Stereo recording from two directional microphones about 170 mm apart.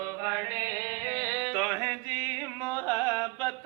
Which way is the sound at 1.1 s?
10° right (ahead or behind).